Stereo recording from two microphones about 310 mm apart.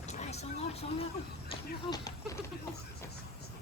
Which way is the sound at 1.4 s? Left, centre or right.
Centre.